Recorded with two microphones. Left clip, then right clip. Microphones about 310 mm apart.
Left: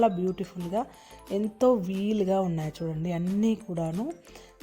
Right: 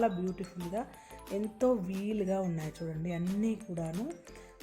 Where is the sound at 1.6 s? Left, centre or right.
Left.